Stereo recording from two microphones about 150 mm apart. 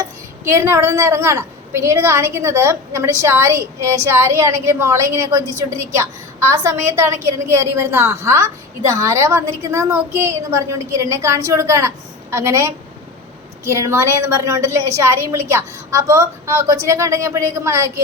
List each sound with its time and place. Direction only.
0.0 s a woman's voice: 20° right (ahead or behind)
6.6 s a woman's voice: 20° right (ahead or behind)